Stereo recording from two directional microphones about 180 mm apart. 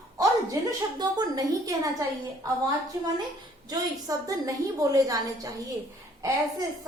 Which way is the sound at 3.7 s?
20° right (ahead or behind).